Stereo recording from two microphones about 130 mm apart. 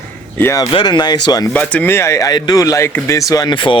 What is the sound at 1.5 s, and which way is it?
Speech, 10° left (ahead or behind).